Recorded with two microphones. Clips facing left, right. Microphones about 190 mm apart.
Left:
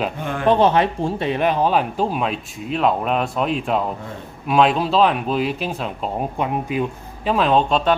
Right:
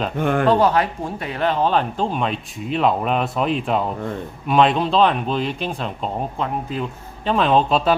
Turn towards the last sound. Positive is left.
turn(degrees=0)  # may be behind; listen again after turning